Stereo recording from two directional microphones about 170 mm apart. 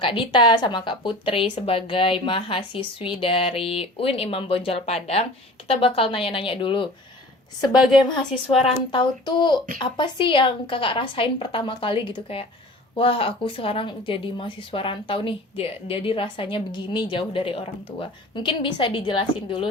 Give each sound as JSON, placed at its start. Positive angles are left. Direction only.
{"t": 0.0, "sound": "speech", "side_deg": 30}
{"t": 8.6, "sound": "speech", "side_deg": 30}